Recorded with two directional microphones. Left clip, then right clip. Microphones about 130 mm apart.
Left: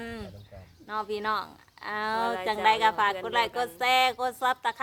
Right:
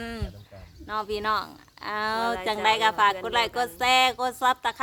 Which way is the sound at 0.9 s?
35° right (ahead or behind).